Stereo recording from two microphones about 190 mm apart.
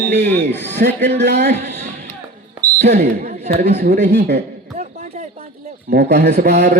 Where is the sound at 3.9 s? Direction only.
60° right (ahead or behind).